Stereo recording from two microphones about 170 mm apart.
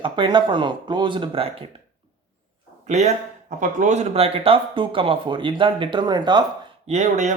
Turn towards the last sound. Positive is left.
turn(degrees=-45)  # may be behind; listen again after turning